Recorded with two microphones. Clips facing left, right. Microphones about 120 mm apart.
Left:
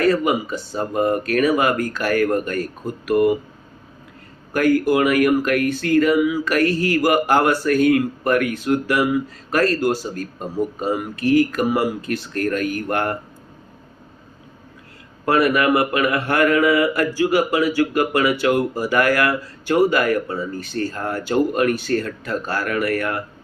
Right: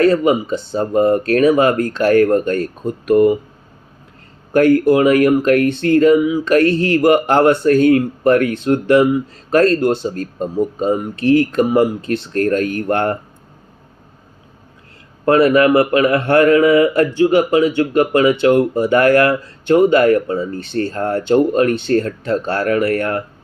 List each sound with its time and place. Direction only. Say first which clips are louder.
0.0 s speech: right 5 dB; 25° right (ahead or behind)
4.5 s speech: right 5 dB; 30° right (ahead or behind)
15.2 s speech: right 6 dB; 30° right (ahead or behind)